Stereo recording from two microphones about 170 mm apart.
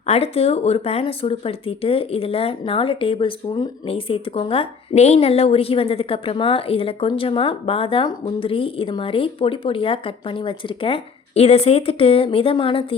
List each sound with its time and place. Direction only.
0.0 s speech: 35° left (ahead or behind)